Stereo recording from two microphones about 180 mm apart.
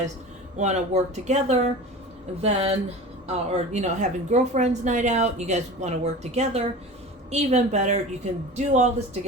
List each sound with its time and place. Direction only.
0.5 s speech: 40° right (ahead or behind)